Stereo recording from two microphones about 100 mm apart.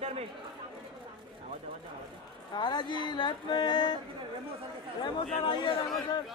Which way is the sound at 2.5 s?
50° left (ahead or behind).